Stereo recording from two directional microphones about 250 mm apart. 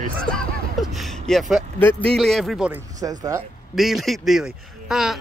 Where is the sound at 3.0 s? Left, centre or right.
Centre.